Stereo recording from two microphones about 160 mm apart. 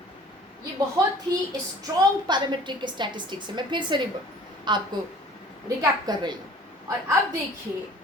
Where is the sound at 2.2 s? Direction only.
30° right (ahead or behind).